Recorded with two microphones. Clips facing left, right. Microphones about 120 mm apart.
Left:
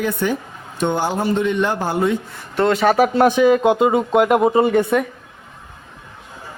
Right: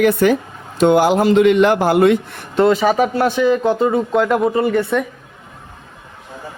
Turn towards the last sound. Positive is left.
turn(degrees=20)  # may be behind; listen again after turning